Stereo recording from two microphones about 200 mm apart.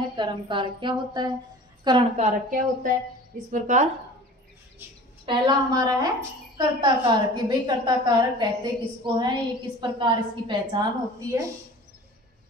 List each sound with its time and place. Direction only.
0.1 s a woman's voice: 25° right (ahead or behind)
5.2 s a woman's voice: 20° right (ahead or behind)